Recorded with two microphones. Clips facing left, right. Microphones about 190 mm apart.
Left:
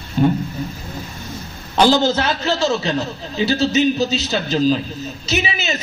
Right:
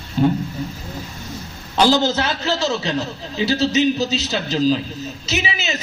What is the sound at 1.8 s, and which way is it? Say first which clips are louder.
A man's voice: left 2 dB; 55° left (ahead or behind).